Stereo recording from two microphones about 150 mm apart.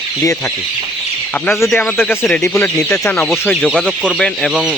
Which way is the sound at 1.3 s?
5° left (ahead or behind).